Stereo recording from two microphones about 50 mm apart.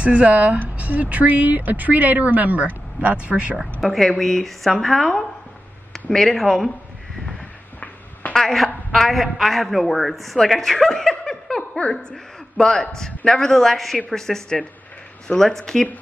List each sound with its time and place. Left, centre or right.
0.0 s speech: right
3.8 s speech: centre
8.9 s a woman's voice: centre